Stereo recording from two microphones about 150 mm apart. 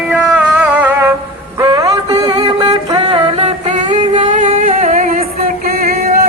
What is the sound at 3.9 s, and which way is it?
Music, 35° right (ahead or behind).